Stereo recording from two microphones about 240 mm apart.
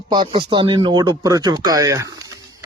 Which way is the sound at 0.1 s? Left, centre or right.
Centre.